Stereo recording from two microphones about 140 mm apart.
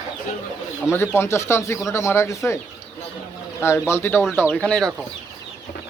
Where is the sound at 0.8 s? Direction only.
20° left (ahead or behind).